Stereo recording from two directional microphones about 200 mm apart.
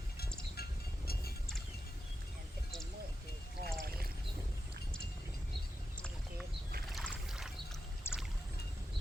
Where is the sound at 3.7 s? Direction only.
50° right (ahead or behind).